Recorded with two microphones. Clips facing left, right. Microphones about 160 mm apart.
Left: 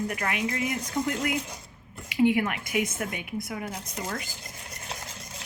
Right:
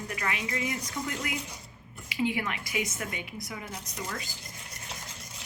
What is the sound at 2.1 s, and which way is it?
Speech, 55° left (ahead or behind).